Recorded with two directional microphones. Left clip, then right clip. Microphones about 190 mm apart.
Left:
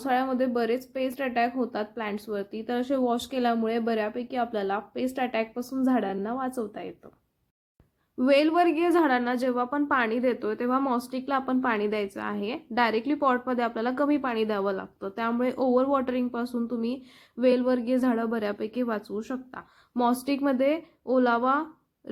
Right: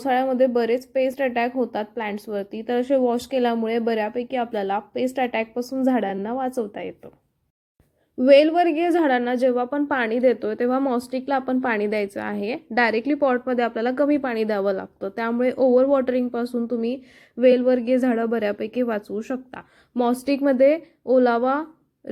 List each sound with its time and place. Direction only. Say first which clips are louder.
0.0 s a woman's voice: right 6 dB; 15° right (ahead or behind)
8.2 s a woman's voice: right 7 dB; 15° right (ahead or behind)